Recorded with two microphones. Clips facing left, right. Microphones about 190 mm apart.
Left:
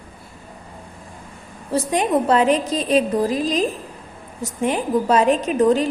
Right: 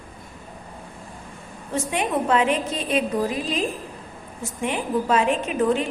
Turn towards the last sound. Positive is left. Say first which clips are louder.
# left 5 dB
turn(degrees=40)  # may be behind; listen again after turning